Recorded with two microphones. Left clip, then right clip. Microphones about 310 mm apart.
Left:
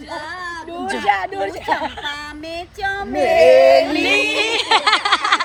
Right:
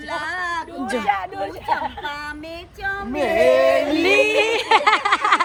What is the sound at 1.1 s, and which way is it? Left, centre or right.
Speech, left.